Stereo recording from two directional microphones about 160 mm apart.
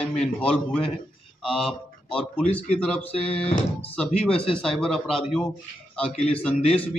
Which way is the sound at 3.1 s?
40° left (ahead or behind).